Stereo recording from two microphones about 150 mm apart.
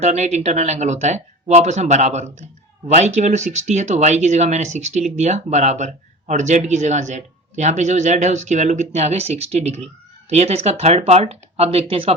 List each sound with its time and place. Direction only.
0.0 s speech: 50° right (ahead or behind)